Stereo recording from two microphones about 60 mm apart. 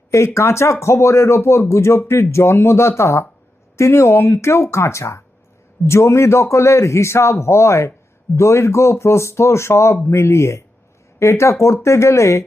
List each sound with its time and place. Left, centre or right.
0.3 s speech: left